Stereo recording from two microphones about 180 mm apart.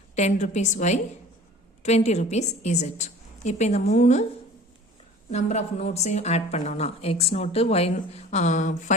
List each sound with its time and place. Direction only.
0.2 s a woman's voice: 40° left (ahead or behind)
5.3 s a woman's voice: 40° left (ahead or behind)